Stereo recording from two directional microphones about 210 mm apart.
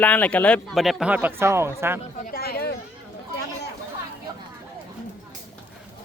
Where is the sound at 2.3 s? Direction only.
45° left (ahead or behind).